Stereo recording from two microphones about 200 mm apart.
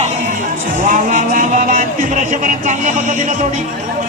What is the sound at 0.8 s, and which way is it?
Speech, 40° right (ahead or behind).